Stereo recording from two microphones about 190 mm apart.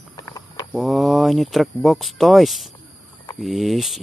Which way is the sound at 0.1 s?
20° left (ahead or behind).